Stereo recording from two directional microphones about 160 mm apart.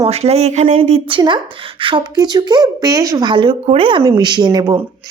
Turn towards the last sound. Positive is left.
turn(degrees=-25)  # may be behind; listen again after turning